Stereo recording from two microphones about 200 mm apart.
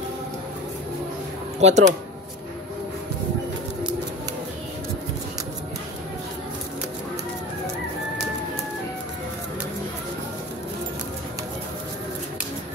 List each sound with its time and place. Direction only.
1.6 s speech: 35° right (ahead or behind)